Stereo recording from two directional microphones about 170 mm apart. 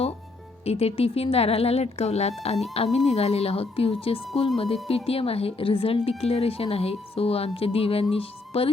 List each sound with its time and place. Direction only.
0.6 s a woman's voice: 35° left (ahead or behind)